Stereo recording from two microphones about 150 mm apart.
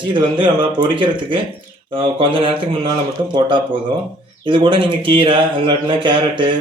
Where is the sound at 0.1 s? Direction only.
30° right (ahead or behind).